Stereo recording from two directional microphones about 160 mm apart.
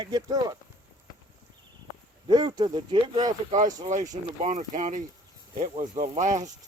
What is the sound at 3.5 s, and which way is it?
Speech, 50° right (ahead or behind).